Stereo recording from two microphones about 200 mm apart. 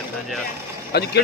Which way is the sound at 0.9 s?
55° left (ahead or behind).